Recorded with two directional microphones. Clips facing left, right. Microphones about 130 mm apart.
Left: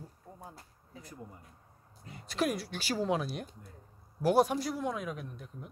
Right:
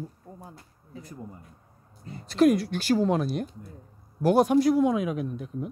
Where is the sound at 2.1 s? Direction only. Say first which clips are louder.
Right 12 dB; 10° left (ahead or behind); by 5.7 s 10° right (ahead or behind).